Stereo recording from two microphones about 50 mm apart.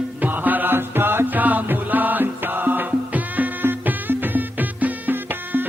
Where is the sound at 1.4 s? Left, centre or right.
Right.